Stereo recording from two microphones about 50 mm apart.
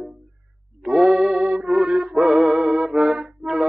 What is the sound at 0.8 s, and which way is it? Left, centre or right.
Music, centre.